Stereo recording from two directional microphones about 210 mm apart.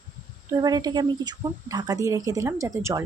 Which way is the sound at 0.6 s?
20° right (ahead or behind).